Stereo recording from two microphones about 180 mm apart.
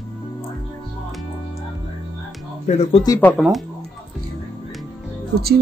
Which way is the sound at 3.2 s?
10° left (ahead or behind).